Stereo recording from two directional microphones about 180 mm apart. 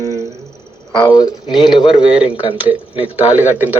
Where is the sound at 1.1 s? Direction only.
20° left (ahead or behind).